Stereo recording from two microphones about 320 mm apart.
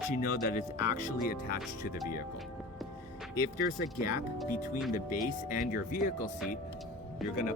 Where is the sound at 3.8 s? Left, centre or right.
Centre.